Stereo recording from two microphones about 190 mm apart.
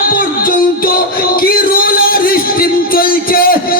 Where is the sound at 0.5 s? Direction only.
50° left (ahead or behind).